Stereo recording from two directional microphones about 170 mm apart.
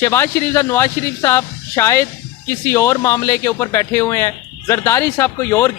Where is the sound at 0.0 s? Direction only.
15° left (ahead or behind).